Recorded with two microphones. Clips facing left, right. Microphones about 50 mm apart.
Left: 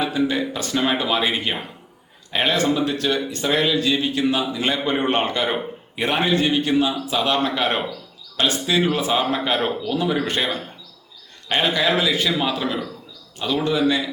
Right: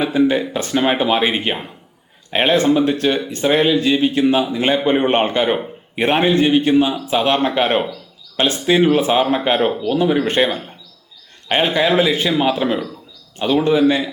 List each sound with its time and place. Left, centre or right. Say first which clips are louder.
0.0 s speech: right 5 dB; right